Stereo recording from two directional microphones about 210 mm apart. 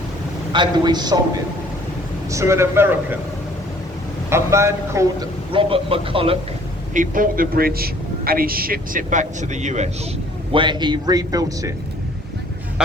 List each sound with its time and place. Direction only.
0.5 s a man's voice: 20° right (ahead or behind)
2.3 s a man's voice: 15° right (ahead or behind)
4.3 s a man's voice: 15° right (ahead or behind)
6.9 s a man's voice: 40° right (ahead or behind)
10.5 s a man's voice: 20° right (ahead or behind)